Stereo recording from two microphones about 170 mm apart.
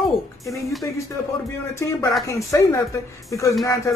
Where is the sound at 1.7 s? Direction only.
15° left (ahead or behind).